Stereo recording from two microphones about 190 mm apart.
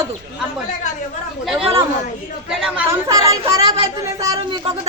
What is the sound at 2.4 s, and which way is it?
Speech, 10° right (ahead or behind).